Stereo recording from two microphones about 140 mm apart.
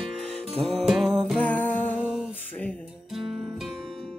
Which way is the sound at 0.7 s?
Centre (ahead or behind).